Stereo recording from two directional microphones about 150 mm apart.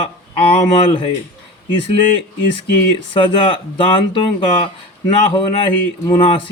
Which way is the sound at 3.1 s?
35° left (ahead or behind).